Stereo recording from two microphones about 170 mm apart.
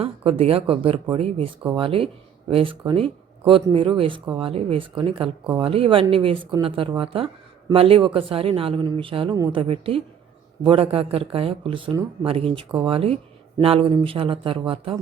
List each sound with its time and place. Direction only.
0.0 s speech: 35° right (ahead or behind)